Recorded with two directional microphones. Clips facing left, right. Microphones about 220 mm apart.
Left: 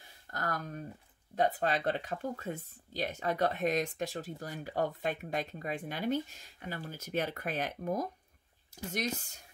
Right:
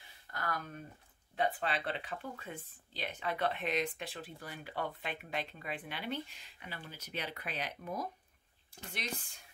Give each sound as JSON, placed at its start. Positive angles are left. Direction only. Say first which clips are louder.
{"t": 0.3, "sound": "speech", "louder": "left 3 dB", "side_deg": 40}